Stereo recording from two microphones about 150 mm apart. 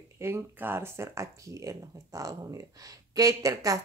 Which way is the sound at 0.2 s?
15° right (ahead or behind).